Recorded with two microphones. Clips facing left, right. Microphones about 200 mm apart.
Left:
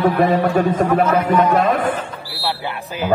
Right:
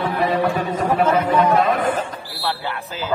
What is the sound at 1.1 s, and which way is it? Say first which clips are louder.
Speech: left 1 dB; 30° right (ahead or behind).